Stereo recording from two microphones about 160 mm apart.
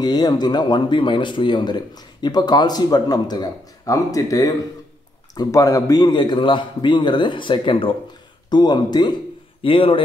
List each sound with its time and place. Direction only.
0.0 s a man's voice: 25° left (ahead or behind)